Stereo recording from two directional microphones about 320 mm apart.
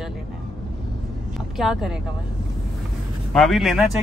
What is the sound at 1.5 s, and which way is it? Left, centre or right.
Speech, centre.